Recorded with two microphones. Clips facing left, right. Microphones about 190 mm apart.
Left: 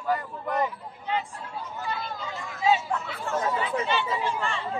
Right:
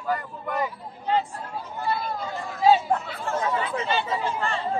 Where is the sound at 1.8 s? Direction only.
35° right (ahead or behind).